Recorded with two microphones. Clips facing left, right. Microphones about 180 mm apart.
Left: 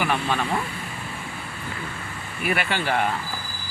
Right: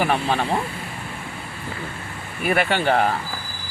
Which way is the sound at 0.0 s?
35° right (ahead or behind).